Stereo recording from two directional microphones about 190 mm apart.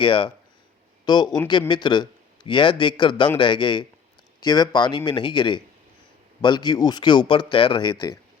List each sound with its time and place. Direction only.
0.0 s speech: 25° left (ahead or behind)